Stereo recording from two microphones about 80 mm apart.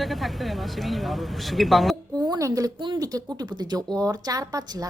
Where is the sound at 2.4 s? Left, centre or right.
Right.